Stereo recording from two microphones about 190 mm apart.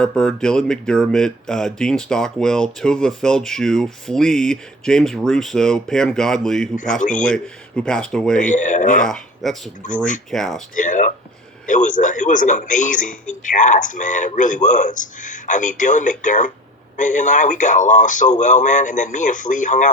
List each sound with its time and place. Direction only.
0.0 s speech: 5° left (ahead or behind)
8.4 s a man's voice: 40° left (ahead or behind)
9.0 s speech: centre (ahead or behind)
10.8 s a man's voice: 40° left (ahead or behind)